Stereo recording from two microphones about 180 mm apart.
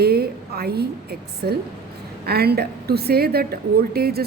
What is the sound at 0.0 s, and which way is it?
A woman's voice, 60° right (ahead or behind).